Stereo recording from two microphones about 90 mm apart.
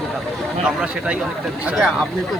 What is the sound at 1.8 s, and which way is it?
Speech, 5° left (ahead or behind).